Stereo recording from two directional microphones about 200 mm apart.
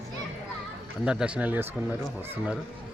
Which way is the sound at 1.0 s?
5° right (ahead or behind).